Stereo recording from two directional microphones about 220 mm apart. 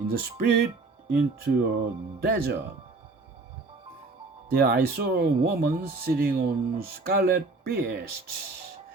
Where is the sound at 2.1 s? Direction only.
45° right (ahead or behind).